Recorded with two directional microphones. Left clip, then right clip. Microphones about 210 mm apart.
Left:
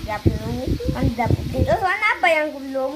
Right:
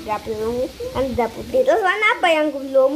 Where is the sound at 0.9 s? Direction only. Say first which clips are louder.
Right 4 dB; 40° right (ahead or behind).